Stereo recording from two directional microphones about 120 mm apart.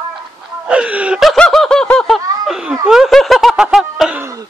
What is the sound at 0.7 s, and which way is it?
Wail, 10° right (ahead or behind).